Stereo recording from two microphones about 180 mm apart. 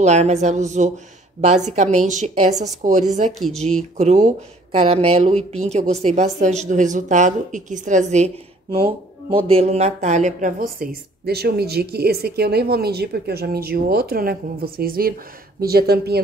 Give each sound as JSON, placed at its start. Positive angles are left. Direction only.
{"t": 0.0, "sound": "a woman's voice", "side_deg": -40}
{"t": 3.3, "sound": "speech", "side_deg": 0}
{"t": 3.9, "sound": "a woman's voice", "side_deg": -40}
{"t": 8.7, "sound": "speech", "side_deg": -30}